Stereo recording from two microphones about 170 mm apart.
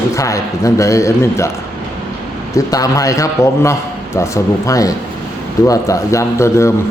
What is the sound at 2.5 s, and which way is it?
A man's voice, 20° left (ahead or behind).